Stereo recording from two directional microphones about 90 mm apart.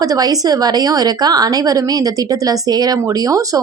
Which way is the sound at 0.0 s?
45° right (ahead or behind).